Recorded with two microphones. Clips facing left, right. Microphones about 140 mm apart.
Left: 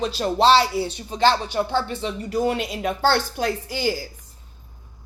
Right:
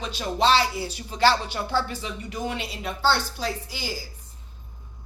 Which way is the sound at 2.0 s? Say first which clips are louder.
Left 8 dB; 40° left (ahead or behind).